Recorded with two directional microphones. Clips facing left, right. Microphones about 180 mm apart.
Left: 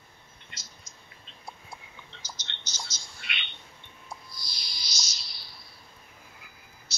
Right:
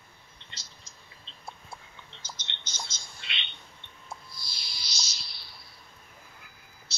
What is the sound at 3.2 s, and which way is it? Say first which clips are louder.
Bird: left 2 dB; 25° right (ahead or behind).